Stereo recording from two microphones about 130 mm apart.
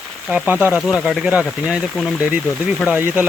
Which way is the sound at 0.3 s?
10° right (ahead or behind).